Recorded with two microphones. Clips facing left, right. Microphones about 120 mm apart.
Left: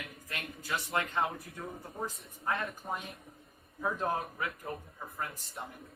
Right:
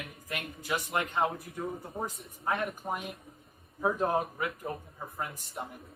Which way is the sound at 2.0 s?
30° right (ahead or behind).